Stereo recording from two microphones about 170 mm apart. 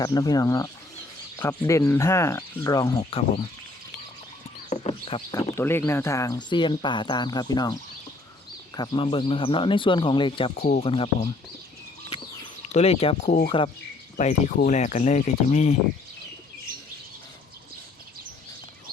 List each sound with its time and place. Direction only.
0.0 s speech: 20° left (ahead or behind)
3.0 s speech: 35° left (ahead or behind)
4.7 s a sound: 35° left (ahead or behind)
5.3 s speech: 15° left (ahead or behind); by 11.1 s 35° left (ahead or behind)
12.6 s speech: 40° left (ahead or behind)